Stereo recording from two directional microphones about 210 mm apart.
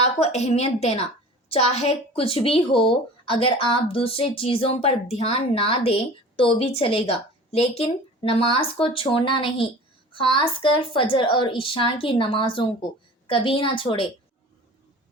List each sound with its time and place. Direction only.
0.0 s a woman's voice: 30° left (ahead or behind)